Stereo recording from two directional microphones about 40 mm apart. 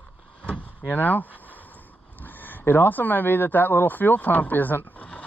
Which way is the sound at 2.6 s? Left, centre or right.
Left.